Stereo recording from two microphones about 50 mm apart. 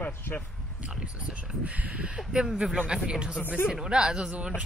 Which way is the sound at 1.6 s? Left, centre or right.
Right.